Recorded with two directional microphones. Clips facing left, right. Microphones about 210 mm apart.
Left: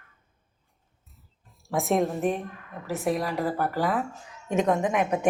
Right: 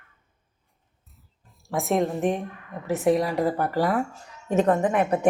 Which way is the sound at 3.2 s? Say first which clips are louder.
Right 4 dB; 15° right (ahead or behind).